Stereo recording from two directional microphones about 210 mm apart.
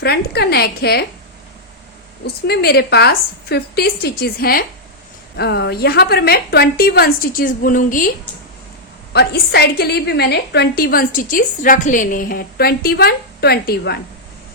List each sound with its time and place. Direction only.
0.0 s a woman's voice: 50° left (ahead or behind)
2.2 s a woman's voice: 50° left (ahead or behind)
9.1 s a woman's voice: 50° left (ahead or behind)